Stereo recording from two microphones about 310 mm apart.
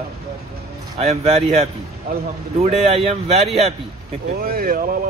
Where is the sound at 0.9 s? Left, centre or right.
Centre.